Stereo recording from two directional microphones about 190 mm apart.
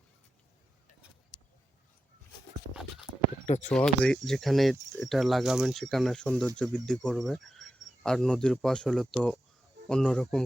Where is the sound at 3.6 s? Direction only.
5° left (ahead or behind).